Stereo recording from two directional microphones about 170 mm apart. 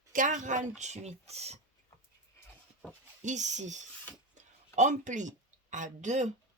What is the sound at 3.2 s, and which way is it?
Speech, 45° right (ahead or behind).